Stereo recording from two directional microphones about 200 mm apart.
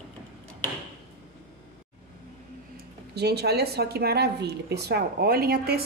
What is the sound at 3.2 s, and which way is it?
A woman's voice, 55° right (ahead or behind).